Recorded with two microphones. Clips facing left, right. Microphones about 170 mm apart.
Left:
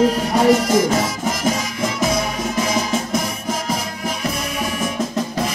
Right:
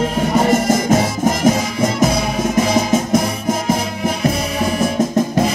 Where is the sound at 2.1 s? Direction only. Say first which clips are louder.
Right 4 dB; 65° right (ahead or behind).